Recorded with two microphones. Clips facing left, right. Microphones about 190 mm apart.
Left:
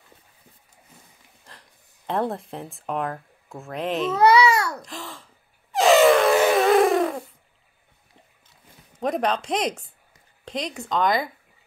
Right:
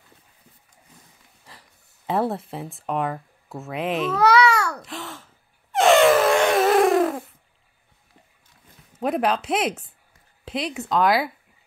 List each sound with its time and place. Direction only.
1.4 s speech: 5° right (ahead or behind)
4.1 s babbling: 20° left (ahead or behind)
4.8 s wail: centre (ahead or behind)
9.0 s speech: 5° right (ahead or behind)